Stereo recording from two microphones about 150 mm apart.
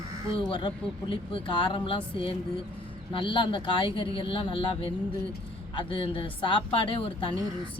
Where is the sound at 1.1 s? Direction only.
30° left (ahead or behind).